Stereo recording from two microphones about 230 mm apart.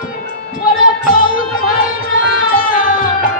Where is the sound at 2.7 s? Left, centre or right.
Left.